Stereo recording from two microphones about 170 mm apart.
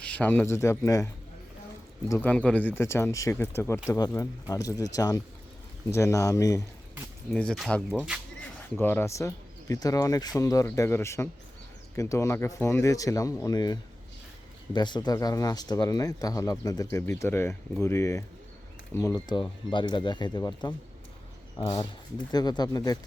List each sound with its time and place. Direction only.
0.0 s speech: 5° left (ahead or behind)
7.3 s speech: 5° left (ahead or behind)
8.8 s speech: 10° left (ahead or behind)